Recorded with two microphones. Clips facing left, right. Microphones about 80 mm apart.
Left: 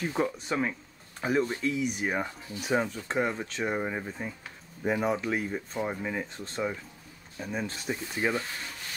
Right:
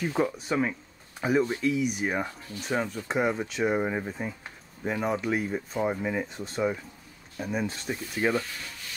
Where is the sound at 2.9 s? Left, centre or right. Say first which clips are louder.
Right 3 dB; centre.